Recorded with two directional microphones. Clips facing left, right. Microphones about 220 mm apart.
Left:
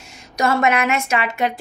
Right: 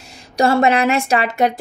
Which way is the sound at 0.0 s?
35° right (ahead or behind).